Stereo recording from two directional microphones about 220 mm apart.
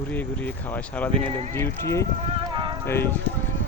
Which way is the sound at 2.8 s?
10° left (ahead or behind).